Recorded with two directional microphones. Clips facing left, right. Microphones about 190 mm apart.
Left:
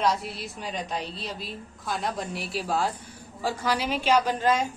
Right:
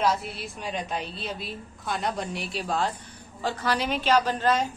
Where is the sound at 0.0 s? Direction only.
Centre (ahead or behind).